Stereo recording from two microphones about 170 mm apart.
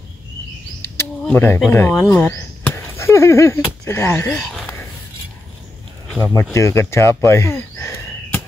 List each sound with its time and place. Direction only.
1.2 s speech: 10° left (ahead or behind)
4.5 s a sound: centre (ahead or behind)
6.3 s speech: 15° left (ahead or behind)